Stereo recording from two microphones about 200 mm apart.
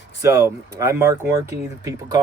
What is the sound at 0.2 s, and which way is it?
Speech, 15° right (ahead or behind).